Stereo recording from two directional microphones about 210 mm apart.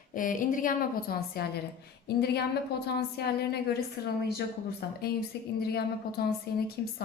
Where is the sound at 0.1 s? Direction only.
40° left (ahead or behind).